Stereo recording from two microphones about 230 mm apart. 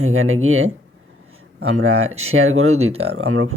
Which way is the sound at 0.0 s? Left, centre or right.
Right.